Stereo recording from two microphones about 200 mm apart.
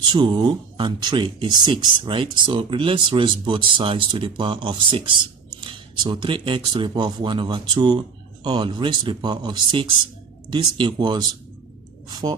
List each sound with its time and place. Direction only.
0.1 s speech: 25° right (ahead or behind)